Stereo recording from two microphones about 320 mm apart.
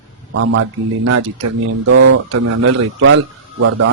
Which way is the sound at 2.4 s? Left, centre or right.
Right.